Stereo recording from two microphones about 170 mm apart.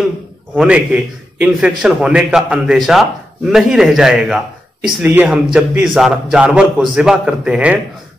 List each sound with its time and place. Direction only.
0.6 s a man's voice: 5° right (ahead or behind)